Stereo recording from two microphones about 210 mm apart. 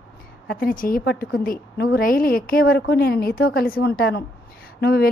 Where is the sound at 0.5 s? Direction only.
45° left (ahead or behind).